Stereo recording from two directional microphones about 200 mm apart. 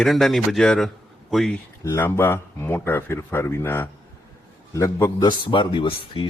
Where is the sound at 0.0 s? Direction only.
Centre (ahead or behind).